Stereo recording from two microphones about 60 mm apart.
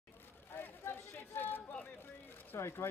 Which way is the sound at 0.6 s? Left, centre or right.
Left.